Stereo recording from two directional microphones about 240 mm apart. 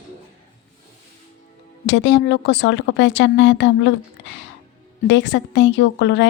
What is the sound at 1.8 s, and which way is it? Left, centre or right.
A woman's voice, left.